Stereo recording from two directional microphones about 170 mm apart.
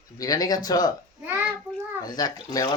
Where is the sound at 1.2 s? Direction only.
10° right (ahead or behind).